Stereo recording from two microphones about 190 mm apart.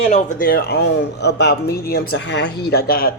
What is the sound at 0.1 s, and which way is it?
A man's voice, 50° left (ahead or behind).